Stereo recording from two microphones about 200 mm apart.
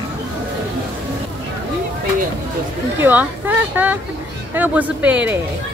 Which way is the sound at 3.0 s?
10° right (ahead or behind).